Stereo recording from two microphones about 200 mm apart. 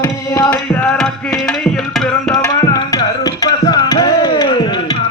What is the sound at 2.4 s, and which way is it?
Tabla, 15° left (ahead or behind).